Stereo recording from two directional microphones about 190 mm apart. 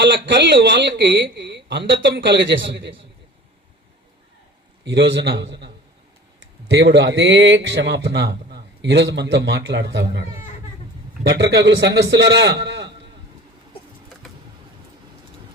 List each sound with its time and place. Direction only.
0.0 s a man's voice: 70° right (ahead or behind)
4.9 s a man's voice: 75° right (ahead or behind)